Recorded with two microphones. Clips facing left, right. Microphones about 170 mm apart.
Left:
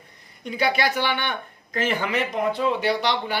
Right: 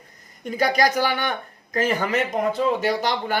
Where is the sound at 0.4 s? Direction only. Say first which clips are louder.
Right 3 dB; 45° right (ahead or behind).